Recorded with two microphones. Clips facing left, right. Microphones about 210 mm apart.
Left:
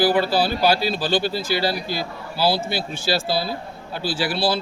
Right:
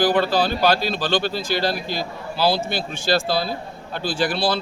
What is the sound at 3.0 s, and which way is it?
A man's voice, 5° left (ahead or behind).